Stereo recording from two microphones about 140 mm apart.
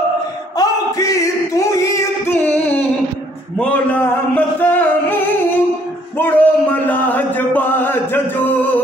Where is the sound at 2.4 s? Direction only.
10° left (ahead or behind).